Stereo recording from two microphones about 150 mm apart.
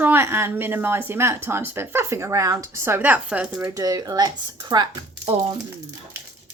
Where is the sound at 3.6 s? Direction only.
25° right (ahead or behind).